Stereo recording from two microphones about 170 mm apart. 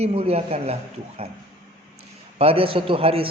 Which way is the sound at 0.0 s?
35° right (ahead or behind).